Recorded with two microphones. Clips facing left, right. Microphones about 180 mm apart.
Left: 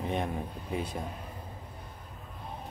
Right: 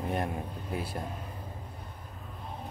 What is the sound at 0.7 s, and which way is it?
Speech, 5° right (ahead or behind).